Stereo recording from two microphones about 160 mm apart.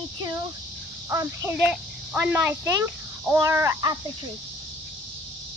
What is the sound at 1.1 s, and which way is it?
Speech, 20° right (ahead or behind).